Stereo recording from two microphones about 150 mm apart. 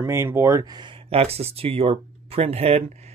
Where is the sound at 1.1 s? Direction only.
45° right (ahead or behind).